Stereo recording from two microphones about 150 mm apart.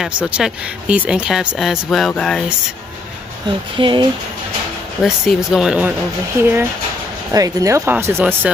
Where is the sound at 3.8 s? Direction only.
30° right (ahead or behind).